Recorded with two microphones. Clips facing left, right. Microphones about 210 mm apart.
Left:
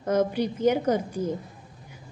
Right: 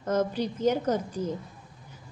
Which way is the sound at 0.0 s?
10° left (ahead or behind).